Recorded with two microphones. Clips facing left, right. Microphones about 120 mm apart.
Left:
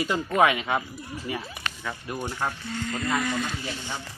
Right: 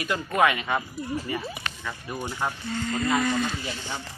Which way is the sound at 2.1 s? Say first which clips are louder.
Right 1 dB; 10° right (ahead or behind).